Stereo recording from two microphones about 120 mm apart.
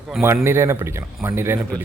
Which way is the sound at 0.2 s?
20° right (ahead or behind).